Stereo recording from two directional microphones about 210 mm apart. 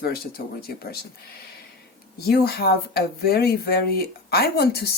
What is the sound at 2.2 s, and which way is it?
Speech, 50° left (ahead or behind).